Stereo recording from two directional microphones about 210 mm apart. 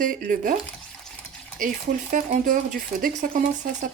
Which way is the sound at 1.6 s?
40° right (ahead or behind).